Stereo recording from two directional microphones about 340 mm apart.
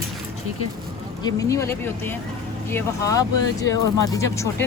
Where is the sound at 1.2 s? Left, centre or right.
Centre.